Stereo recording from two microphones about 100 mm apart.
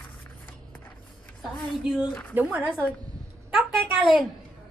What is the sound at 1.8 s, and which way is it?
Speech, 5° right (ahead or behind).